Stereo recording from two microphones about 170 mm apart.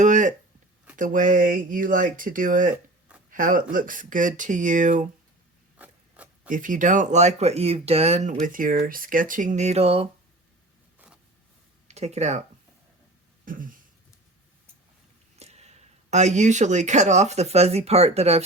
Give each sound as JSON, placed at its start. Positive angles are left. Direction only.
{"t": 0.0, "sound": "a sound", "side_deg": -45}
{"t": 0.9, "sound": "speech", "side_deg": -50}
{"t": 5.8, "sound": "filing", "side_deg": -10}
{"t": 6.5, "sound": "speech", "side_deg": -50}
{"t": 11.9, "sound": "speech", "side_deg": -40}
{"t": 13.4, "sound": "a sound", "side_deg": -55}
{"t": 15.4, "sound": "speech", "side_deg": -40}